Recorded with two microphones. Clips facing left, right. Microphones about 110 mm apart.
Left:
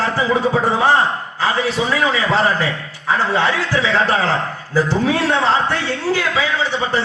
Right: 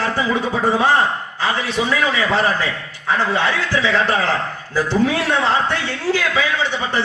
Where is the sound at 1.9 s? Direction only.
20° left (ahead or behind).